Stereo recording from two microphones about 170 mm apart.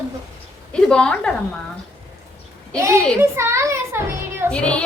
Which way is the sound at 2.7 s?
15° right (ahead or behind).